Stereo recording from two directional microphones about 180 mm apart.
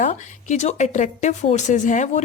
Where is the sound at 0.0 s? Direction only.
40° left (ahead or behind).